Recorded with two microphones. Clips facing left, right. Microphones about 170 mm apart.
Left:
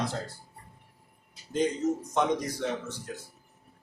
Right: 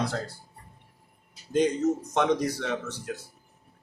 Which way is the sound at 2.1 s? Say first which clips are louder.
Right 2 dB; 75° right (ahead or behind).